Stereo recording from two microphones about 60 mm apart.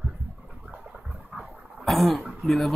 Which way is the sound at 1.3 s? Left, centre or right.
Right.